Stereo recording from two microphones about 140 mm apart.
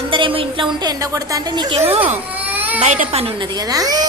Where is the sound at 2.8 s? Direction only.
50° right (ahead or behind); by 4.0 s 25° right (ahead or behind).